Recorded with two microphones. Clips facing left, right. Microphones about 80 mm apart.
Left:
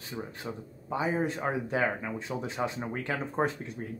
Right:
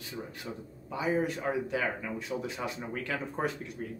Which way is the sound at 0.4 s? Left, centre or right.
Left.